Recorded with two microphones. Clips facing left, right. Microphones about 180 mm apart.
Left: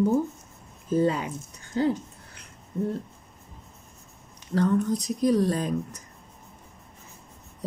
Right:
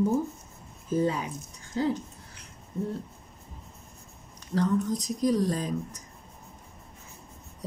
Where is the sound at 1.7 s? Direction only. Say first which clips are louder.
Left 3 dB; 60° left (ahead or behind).